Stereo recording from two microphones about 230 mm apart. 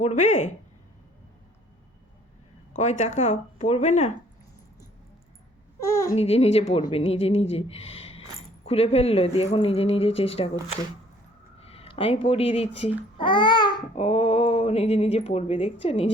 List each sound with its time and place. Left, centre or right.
0.0 s speech: left
2.7 s speech: left
5.8 s speech: centre
6.1 s speech: left
11.6 s speech: left